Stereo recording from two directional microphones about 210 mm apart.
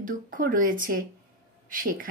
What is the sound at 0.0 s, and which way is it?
Speech, 40° right (ahead or behind).